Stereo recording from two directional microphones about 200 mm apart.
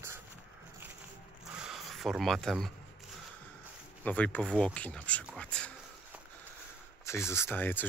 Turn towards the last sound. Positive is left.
turn(degrees=10)  # may be behind; listen again after turning